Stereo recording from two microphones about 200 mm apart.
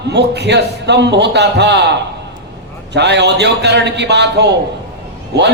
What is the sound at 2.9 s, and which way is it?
A man's voice, 60° right (ahead or behind).